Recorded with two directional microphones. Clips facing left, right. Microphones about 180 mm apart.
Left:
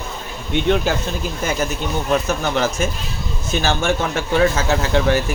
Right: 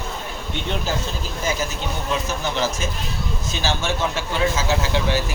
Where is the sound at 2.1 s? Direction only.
55° left (ahead or behind).